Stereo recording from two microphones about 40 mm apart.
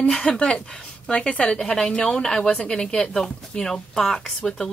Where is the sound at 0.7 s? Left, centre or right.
Centre.